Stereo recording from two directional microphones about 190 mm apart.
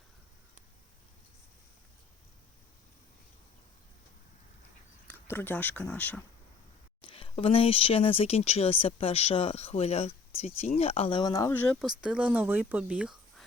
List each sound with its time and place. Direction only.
5.0 s speech: 10° left (ahead or behind)
7.0 s speech: 25° left (ahead or behind); by 13.4 s 5° right (ahead or behind)